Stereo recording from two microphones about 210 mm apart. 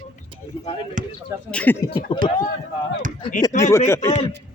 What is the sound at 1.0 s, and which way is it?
Speech, 35° right (ahead or behind).